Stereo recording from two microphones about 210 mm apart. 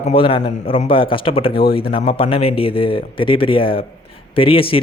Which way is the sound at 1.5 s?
45° left (ahead or behind).